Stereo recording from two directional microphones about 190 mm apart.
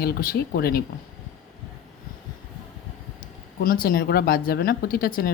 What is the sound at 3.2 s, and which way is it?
Speech, 50° left (ahead or behind).